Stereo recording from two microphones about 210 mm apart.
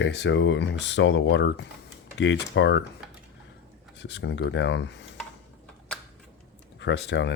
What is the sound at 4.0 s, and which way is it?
Speech, 55° left (ahead or behind).